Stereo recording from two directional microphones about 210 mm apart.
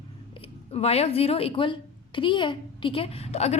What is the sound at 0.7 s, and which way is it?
A woman's voice, 30° left (ahead or behind).